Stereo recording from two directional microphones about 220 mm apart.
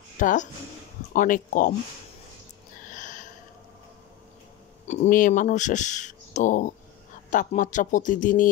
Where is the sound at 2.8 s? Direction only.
35° left (ahead or behind).